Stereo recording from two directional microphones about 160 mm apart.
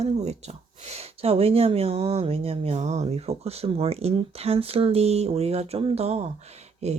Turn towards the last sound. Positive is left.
turn(degrees=-40)  # may be behind; listen again after turning